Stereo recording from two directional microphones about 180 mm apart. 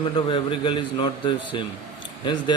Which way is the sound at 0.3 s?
30° left (ahead or behind).